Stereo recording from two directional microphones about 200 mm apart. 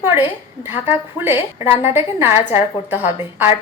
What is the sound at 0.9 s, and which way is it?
A woman's voice, 10° right (ahead or behind).